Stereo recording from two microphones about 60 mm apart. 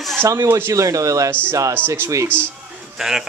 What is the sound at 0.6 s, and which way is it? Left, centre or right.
Speech, right.